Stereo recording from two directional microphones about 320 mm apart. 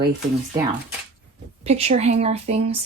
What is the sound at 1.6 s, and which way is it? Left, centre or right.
Speech, centre.